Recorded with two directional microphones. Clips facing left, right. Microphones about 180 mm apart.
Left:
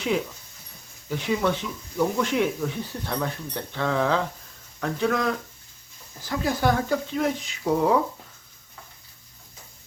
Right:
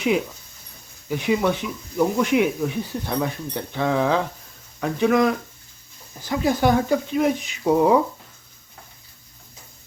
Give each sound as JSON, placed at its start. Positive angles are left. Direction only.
{"t": 1.1, "sound": "speech", "side_deg": -15}